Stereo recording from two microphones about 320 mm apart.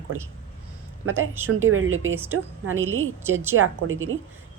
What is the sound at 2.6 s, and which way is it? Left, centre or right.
A woman's voice, right.